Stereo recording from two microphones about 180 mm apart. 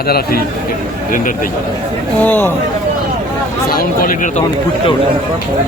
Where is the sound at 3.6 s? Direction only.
55° left (ahead or behind).